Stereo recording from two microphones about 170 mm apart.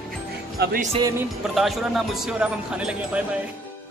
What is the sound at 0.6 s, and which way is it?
Speech, 75° right (ahead or behind).